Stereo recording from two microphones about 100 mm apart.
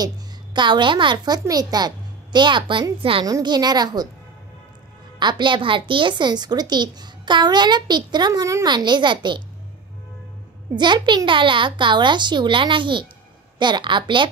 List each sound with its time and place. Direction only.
0.0 s a woman's voice: 50° right (ahead or behind)
3.3 s speech: 40° right (ahead or behind)
5.2 s speech: 55° right (ahead or behind); by 8.6 s 35° right (ahead or behind)
8.6 s speech: 50° right (ahead or behind)
10.7 s speech: 50° right (ahead or behind)